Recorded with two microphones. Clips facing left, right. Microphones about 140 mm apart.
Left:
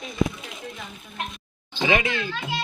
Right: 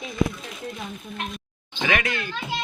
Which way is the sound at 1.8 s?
25° left (ahead or behind).